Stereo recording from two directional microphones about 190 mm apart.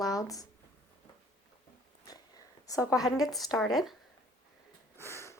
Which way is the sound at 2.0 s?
20° left (ahead or behind).